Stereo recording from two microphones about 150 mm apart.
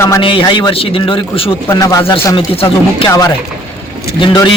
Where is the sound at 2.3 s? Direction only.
40° left (ahead or behind).